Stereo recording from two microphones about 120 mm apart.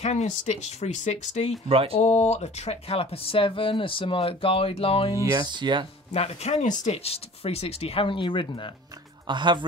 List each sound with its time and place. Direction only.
0.0 s speech: 70° left (ahead or behind)
1.7 s speech: 50° right (ahead or behind)
2.0 s speech: 65° left (ahead or behind)
5.1 s speech: 25° right (ahead or behind)
6.1 s speech: 60° left (ahead or behind); by 8.5 s 45° left (ahead or behind)
9.3 s speech: 40° right (ahead or behind)